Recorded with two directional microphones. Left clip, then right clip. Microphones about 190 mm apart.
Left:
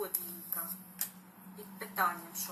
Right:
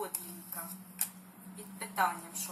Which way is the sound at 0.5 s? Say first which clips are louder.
Right 1 dB; centre (ahead or behind).